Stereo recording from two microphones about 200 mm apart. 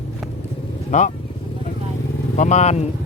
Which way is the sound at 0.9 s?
35° left (ahead or behind).